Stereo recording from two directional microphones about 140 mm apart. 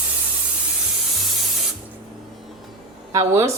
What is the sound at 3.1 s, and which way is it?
Speech, 25° right (ahead or behind).